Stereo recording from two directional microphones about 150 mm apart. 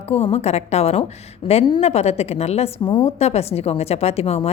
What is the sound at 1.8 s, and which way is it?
A woman's voice, 45° left (ahead or behind).